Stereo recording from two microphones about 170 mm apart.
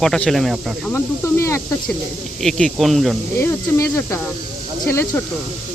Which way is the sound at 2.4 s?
5° left (ahead or behind).